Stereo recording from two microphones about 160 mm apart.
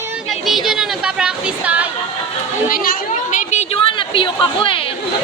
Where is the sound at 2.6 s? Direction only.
60° left (ahead or behind); by 4.8 s 35° left (ahead or behind).